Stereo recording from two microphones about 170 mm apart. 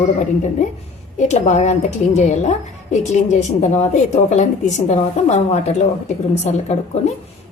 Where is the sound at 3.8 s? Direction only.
45° left (ahead or behind).